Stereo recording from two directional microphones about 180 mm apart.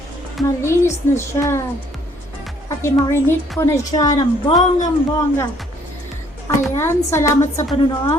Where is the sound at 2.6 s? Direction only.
15° left (ahead or behind).